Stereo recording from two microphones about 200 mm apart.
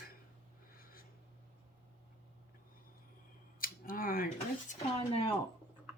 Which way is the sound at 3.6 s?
45° left (ahead or behind).